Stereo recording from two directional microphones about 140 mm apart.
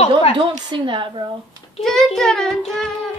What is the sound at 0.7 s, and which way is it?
Speech, 35° right (ahead or behind).